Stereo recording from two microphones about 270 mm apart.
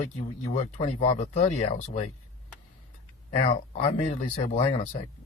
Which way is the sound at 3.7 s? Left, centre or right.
Left.